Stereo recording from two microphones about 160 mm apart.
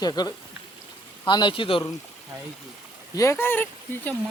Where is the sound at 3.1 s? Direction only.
20° left (ahead or behind).